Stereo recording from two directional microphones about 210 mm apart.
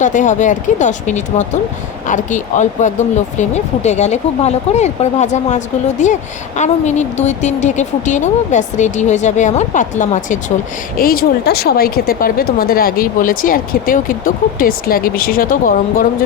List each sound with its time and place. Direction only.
0.0 s speech: 35° left (ahead or behind)